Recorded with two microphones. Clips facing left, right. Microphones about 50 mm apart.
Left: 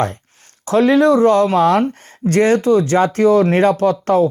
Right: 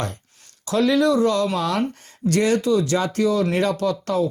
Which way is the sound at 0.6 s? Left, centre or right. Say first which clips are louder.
Left 6 dB; left.